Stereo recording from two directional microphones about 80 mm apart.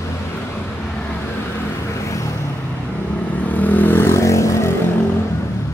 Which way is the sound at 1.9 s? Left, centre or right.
Left.